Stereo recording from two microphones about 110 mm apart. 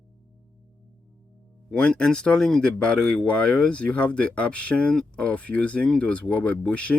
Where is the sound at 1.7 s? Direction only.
10° left (ahead or behind).